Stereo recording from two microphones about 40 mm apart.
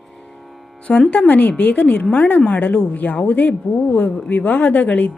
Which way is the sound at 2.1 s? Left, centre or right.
Left.